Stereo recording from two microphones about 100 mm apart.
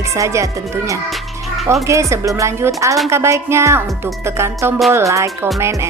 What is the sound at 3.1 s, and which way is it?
A woman's voice, 30° right (ahead or behind).